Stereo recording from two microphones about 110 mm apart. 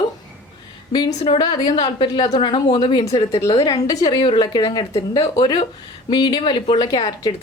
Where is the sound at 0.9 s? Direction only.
45° left (ahead or behind).